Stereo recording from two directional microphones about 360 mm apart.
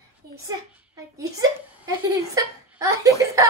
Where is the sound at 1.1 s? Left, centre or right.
Centre.